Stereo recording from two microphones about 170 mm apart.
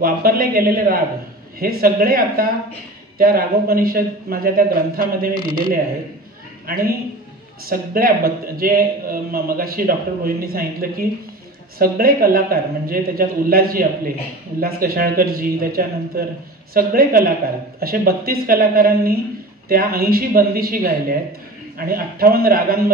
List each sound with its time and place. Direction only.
0.0 s a man's voice: 60° right (ahead or behind)
6.7 s a man's voice: 60° right (ahead or behind)